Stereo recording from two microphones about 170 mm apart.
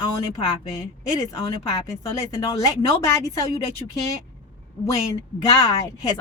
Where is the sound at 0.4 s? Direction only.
20° left (ahead or behind).